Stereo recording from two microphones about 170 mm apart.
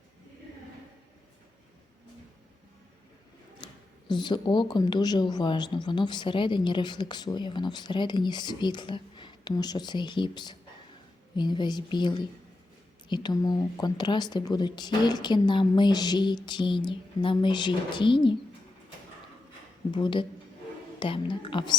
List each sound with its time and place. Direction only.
3.6 s a sound: 25° left (ahead or behind)
4.1 s a woman's voice: 25° left (ahead or behind)
19.9 s a woman's voice: 30° left (ahead or behind)